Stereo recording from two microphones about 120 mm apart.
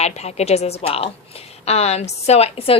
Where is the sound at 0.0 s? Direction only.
65° left (ahead or behind).